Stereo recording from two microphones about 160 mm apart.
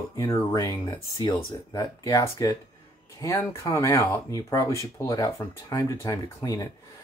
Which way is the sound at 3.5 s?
20° left (ahead or behind).